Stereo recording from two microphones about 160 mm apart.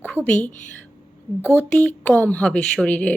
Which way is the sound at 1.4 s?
10° left (ahead or behind).